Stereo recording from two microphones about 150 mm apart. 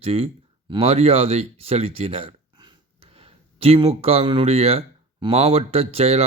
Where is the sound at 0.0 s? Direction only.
40° right (ahead or behind).